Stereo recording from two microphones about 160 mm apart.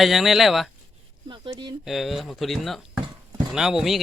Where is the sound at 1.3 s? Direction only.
30° right (ahead or behind).